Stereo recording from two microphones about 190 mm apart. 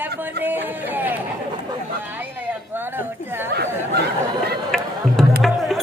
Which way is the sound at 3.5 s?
60° right (ahead or behind).